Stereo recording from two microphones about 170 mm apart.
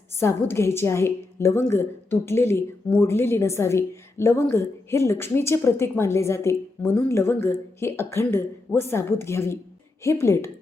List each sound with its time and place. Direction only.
0.2 s a woman's voice: 15° left (ahead or behind)